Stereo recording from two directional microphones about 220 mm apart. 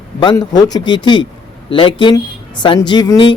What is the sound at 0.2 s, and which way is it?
Speech, 20° left (ahead or behind).